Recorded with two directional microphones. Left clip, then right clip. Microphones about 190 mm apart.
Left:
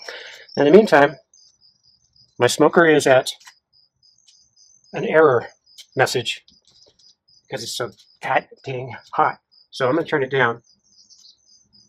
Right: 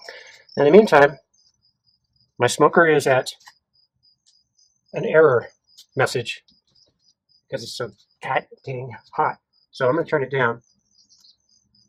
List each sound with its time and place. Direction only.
0.0 s a sound: 20° left (ahead or behind)
2.4 s speech: 10° left (ahead or behind)
4.9 s speech: 15° left (ahead or behind)
7.4 s speech: 30° left (ahead or behind)
8.2 s speech: 15° left (ahead or behind)
9.7 s speech: 15° left (ahead or behind)